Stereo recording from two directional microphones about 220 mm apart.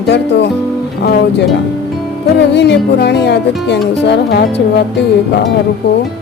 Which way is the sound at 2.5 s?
50° left (ahead or behind).